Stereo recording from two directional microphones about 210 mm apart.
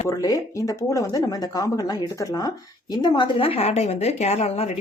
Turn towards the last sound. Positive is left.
turn(degrees=30)  # may be behind; listen again after turning